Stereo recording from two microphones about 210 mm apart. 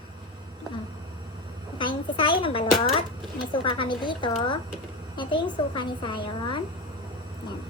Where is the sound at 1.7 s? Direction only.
25° left (ahead or behind).